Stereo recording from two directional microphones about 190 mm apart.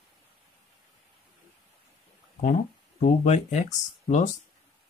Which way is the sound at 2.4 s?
40° left (ahead or behind).